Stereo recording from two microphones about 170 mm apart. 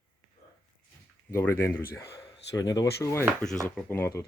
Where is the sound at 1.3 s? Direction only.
15° left (ahead or behind).